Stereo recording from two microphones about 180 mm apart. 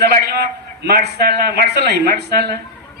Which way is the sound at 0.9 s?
65° right (ahead or behind).